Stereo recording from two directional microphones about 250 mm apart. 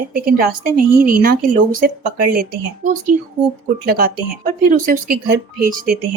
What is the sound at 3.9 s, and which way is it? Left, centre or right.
Speech, right.